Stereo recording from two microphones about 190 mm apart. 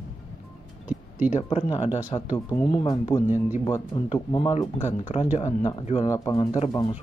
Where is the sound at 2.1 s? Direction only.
20° left (ahead or behind).